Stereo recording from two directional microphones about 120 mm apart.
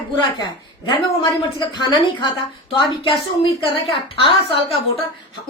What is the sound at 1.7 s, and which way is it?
A woman's voice, 40° left (ahead or behind).